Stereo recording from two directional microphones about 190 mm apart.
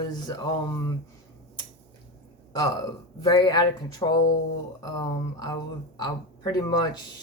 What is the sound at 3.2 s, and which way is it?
Speech, 20° left (ahead or behind).